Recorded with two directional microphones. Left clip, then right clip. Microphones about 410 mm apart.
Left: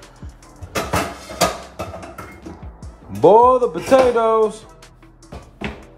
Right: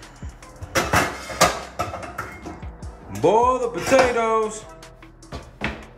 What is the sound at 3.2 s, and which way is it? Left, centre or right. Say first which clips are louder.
Speech: left 7 dB; centre.